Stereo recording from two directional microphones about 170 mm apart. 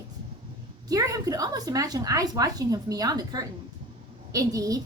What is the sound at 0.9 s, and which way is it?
A woman's voice, 20° right (ahead or behind).